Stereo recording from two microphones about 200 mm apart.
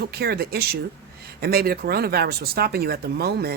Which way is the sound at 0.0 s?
55° right (ahead or behind).